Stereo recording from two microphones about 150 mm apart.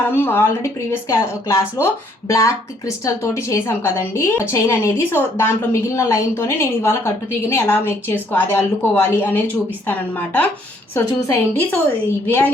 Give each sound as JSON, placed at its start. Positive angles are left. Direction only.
{"t": 0.1, "sound": "a woman's voice", "side_deg": 15}